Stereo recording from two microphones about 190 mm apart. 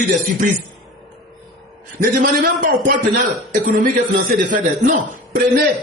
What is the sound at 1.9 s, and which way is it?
Speech, 45° right (ahead or behind).